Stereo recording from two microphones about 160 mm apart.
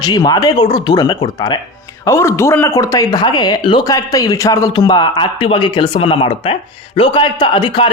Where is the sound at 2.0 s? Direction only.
15° left (ahead or behind).